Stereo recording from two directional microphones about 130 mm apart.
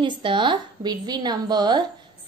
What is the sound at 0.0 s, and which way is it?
A woman's voice, 40° right (ahead or behind).